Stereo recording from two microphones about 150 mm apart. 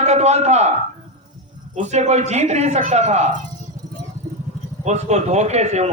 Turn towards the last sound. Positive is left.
turn(degrees=-50)  # may be behind; listen again after turning